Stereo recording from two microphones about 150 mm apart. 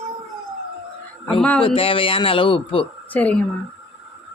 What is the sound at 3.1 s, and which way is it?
Speech, 10° left (ahead or behind).